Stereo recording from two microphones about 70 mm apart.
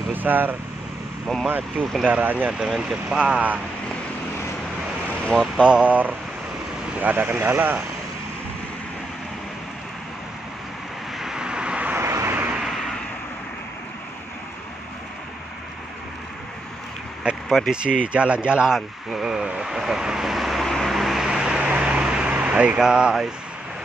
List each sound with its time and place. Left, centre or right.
0.1 s speech: right
1.2 s speech: centre
2.0 s speech: right
5.2 s speech: centre
5.6 s speech: centre
11.1 s vehicle: centre
12.0 s vehicle: right
12.6 s a sound: centre
17.5 s speech: centre
17.8 s speech: centre
18.8 s vehicle: centre